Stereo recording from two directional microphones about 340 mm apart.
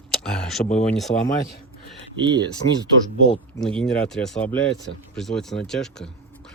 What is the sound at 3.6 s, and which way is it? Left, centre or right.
Speech, centre.